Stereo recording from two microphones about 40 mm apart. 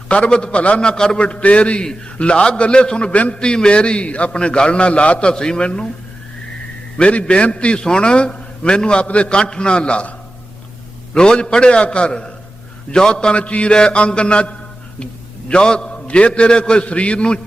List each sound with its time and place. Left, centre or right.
0.1 s a man's voice: left
0.8 s a man's voice: centre
1.2 s a man's voice: left
1.8 s a man's voice: left
3.1 s a man's voice: left
3.3 s a man's voice: left
5.3 s a man's voice: left
6.9 s a man's voice: left
9.0 s a man's voice: left
9.3 s a man's voice: left
13.3 s a man's voice: left